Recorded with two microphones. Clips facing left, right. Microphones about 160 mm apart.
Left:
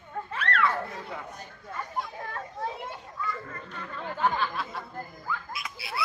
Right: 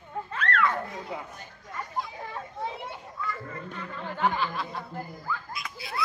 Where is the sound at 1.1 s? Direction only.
15° right (ahead or behind).